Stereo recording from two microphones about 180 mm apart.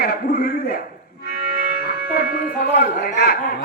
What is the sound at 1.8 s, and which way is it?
Music, 55° left (ahead or behind).